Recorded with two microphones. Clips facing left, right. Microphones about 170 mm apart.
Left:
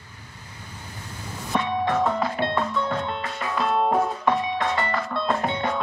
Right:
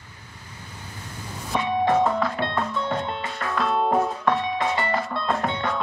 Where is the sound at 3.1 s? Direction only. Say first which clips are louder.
Even; centre (ahead or behind).